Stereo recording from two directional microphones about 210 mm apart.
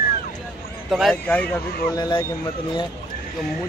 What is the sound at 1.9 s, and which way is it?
Speech, 20° left (ahead or behind).